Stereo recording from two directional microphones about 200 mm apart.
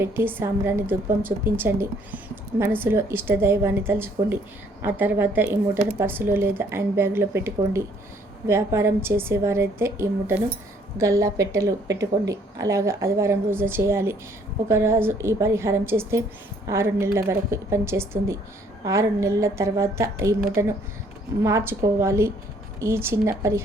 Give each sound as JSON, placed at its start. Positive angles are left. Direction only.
{"t": 0.0, "sound": "a woman's voice", "side_deg": -10}